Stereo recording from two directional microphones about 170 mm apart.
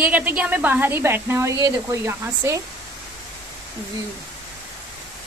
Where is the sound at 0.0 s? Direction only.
10° right (ahead or behind).